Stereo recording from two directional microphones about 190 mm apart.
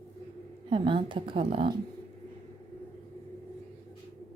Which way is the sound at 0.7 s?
25° right (ahead or behind).